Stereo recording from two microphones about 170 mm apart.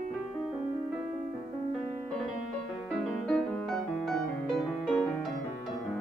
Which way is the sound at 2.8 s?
Centre (ahead or behind).